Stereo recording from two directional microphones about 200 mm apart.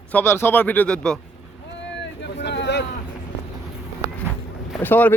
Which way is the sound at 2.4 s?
60° left (ahead or behind).